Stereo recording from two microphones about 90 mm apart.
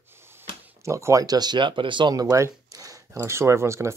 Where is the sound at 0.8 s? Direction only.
35° right (ahead or behind); by 2.1 s 65° right (ahead or behind).